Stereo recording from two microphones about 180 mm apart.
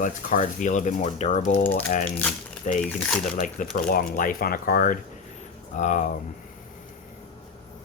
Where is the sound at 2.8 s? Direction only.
5° left (ahead or behind).